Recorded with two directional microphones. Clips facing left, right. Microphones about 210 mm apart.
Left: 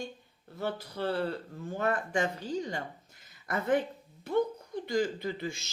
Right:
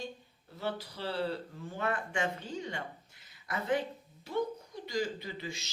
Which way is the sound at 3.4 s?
50° left (ahead or behind).